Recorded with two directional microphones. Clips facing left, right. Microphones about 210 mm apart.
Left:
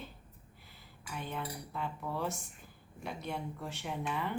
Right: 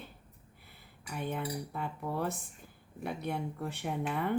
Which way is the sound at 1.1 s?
50° right (ahead or behind).